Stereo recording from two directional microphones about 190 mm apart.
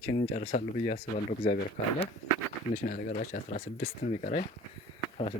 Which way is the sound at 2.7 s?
40° left (ahead or behind).